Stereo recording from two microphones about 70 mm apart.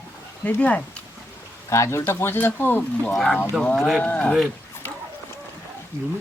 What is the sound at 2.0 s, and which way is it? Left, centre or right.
Speech, left.